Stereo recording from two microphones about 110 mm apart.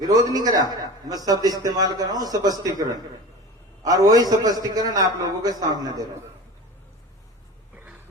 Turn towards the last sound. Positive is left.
turn(degrees=-15)  # may be behind; listen again after turning